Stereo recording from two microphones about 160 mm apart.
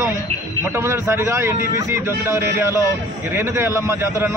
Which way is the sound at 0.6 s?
15° right (ahead or behind).